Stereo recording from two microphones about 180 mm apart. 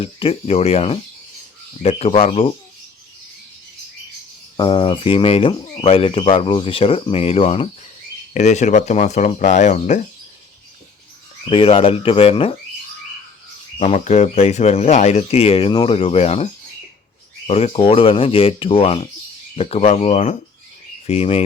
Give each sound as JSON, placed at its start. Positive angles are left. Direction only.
{"t": 0.0, "sound": "speech", "side_deg": 30}
{"t": 4.5, "sound": "speech", "side_deg": 25}
{"t": 11.4, "sound": "speech", "side_deg": 30}
{"t": 13.7, "sound": "speech", "side_deg": 35}